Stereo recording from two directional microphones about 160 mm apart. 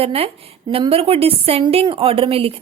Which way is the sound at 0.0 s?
35° right (ahead or behind).